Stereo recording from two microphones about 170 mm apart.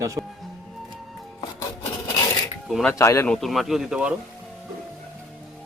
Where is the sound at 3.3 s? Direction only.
Centre (ahead or behind).